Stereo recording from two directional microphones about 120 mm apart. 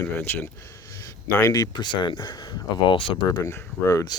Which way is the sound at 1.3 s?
30° left (ahead or behind).